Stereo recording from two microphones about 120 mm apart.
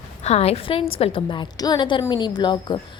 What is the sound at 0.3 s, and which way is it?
A woman's voice, 60° left (ahead or behind).